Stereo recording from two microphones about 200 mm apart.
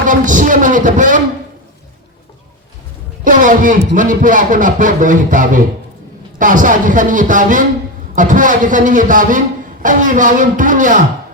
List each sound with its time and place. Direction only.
0.0 s speech: 40° right (ahead or behind)
3.2 s a man's voice: 40° right (ahead or behind)